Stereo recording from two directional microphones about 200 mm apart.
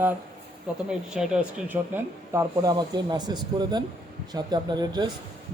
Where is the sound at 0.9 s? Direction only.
5° right (ahead or behind).